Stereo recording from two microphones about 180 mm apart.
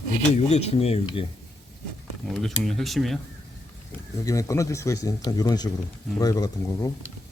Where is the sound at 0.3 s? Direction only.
35° left (ahead or behind).